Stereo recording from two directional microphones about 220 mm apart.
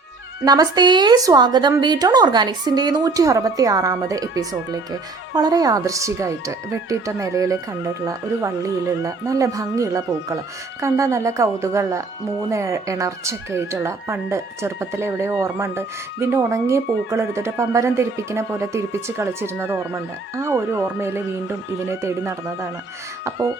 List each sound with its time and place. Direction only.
0.4 s a woman's voice: 15° right (ahead or behind)